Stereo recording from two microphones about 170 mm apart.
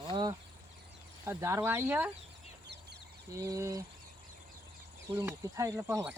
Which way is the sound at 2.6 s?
80° right.